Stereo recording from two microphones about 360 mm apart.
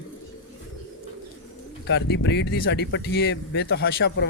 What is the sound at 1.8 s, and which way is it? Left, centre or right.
Speech, left.